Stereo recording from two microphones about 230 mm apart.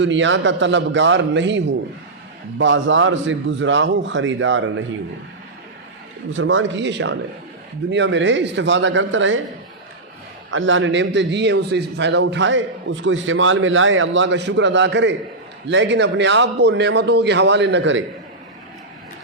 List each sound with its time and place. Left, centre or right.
0.0 s a man's voice: right
6.3 s a man's voice: right
10.5 s a man's voice: right